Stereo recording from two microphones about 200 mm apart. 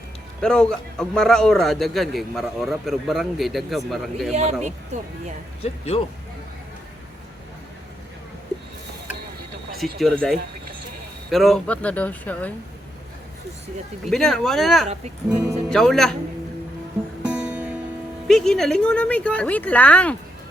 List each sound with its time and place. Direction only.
0.4 s a man's voice: 5° left (ahead or behind)
4.3 s speech: 35° right (ahead or behind)
5.6 s speech: 30° left (ahead or behind)
9.7 s a man's voice: centre (ahead or behind)
14.1 s a man's voice: centre (ahead or behind)
17.2 s music: 5° right (ahead or behind)
18.3 s speech: 5° left (ahead or behind)